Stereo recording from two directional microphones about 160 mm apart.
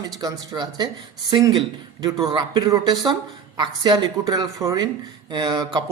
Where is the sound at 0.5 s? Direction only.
25° right (ahead or behind).